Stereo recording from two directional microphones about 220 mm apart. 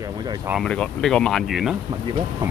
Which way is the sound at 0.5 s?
Centre (ahead or behind).